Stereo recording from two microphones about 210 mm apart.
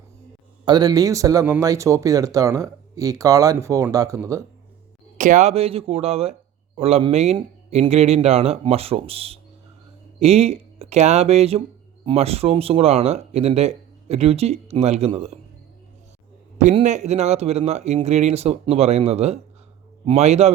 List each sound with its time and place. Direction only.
0.6 s speech: 20° right (ahead or behind)
5.1 s speech: 35° right (ahead or behind)
16.7 s speech: 35° right (ahead or behind)